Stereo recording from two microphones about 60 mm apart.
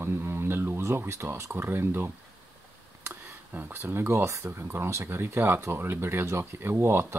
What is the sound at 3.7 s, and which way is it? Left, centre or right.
Speech, right.